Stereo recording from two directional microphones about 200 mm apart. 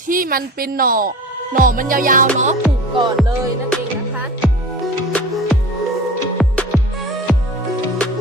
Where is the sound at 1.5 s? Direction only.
45° right (ahead or behind).